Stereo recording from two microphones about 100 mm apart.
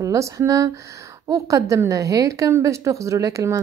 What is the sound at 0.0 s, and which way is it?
A woman's voice, 30° right (ahead or behind).